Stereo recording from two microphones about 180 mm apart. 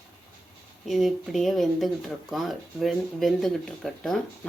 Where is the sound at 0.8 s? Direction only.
Centre (ahead or behind).